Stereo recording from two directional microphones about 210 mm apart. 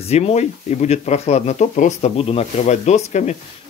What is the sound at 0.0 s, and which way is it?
Speech, 30° left (ahead or behind).